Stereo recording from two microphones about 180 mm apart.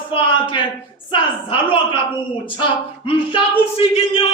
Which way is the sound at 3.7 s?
30° left (ahead or behind).